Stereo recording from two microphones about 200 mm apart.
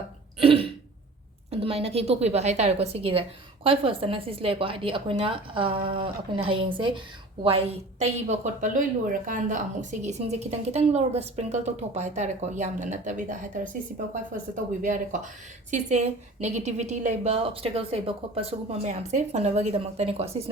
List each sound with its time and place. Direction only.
0.3 s throat clearing: 25° right (ahead or behind)
1.5 s a woman's voice: 30° right (ahead or behind)